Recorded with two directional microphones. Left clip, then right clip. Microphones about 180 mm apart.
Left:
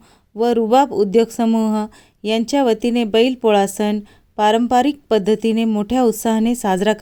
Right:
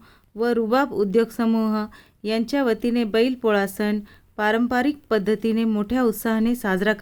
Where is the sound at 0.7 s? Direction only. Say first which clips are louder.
Left 7 dB; 30° left (ahead or behind).